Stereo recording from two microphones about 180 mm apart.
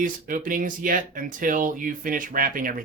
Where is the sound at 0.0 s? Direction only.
45° right (ahead or behind).